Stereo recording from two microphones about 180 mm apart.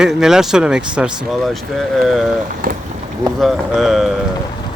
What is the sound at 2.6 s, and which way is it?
Speech, 55° right (ahead or behind).